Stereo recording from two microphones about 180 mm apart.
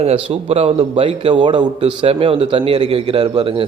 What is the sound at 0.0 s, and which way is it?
A man's voice, 35° right (ahead or behind).